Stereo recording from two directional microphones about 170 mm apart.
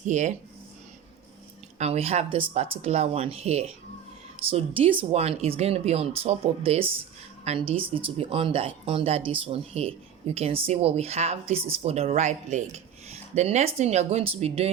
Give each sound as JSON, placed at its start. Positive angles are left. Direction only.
{"t": 0.0, "sound": "speech", "side_deg": -45}
{"t": 1.8, "sound": "speech", "side_deg": -35}